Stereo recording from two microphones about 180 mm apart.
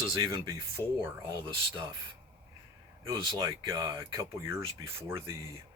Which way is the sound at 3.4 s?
20° right (ahead or behind).